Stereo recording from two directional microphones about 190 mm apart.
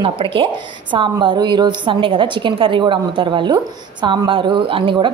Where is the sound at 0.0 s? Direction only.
25° right (ahead or behind).